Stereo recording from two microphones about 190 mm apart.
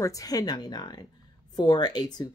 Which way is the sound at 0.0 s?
20° left (ahead or behind).